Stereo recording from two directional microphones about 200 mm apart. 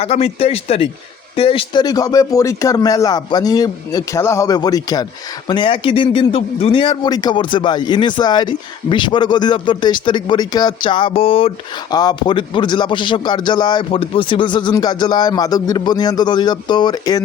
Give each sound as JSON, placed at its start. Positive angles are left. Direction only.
{"t": 0.0, "sound": "a man's voice", "side_deg": 30}